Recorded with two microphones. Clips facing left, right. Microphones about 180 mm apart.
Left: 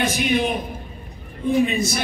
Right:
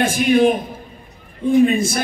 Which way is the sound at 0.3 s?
50° right (ahead or behind).